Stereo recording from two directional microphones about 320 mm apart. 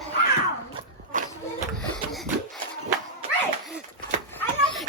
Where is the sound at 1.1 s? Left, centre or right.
Right.